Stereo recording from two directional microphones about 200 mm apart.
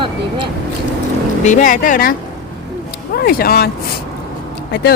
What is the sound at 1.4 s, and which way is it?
Speech, 40° left (ahead or behind).